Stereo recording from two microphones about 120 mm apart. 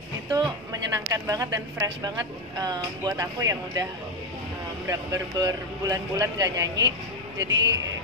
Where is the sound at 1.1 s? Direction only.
30° right (ahead or behind).